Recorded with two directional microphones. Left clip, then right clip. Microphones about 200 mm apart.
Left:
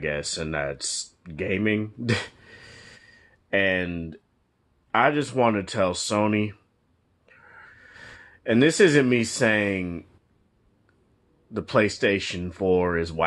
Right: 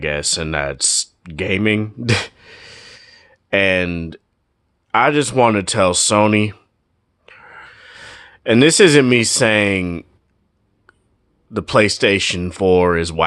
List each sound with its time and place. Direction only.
0.0 s speech: 40° right (ahead or behind)
7.3 s a sound: 40° right (ahead or behind)
11.5 s speech: 40° right (ahead or behind)